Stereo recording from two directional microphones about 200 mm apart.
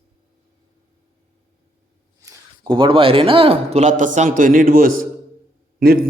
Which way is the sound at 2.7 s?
25° right (ahead or behind).